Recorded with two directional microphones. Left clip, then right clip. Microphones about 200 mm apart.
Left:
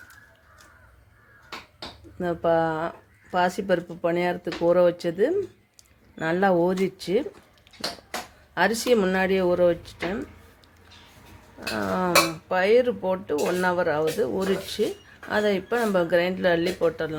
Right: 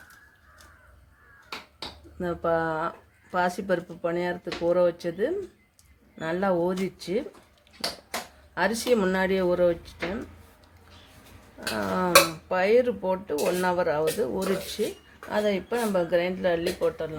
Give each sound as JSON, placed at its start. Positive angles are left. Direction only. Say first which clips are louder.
{"t": 2.1, "sound": "dishes", "louder": "left 4 dB", "side_deg": 15}
{"t": 3.3, "sound": "speech", "louder": "left 3 dB", "side_deg": 15}
{"t": 8.5, "sound": "dishes", "louder": "left 3 dB", "side_deg": 20}
{"t": 11.7, "sound": "dishes", "louder": "right 1 dB", "side_deg": 5}
{"t": 15.3, "sound": "speech", "louder": "left 3 dB", "side_deg": 20}